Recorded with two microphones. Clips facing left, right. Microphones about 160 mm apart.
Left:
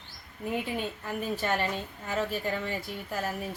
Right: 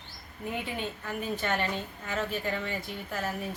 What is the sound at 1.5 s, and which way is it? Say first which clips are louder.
Speech: left 1 dB; centre (ahead or behind).